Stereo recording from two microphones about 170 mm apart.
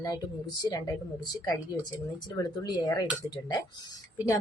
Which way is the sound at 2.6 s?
25° left (ahead or behind).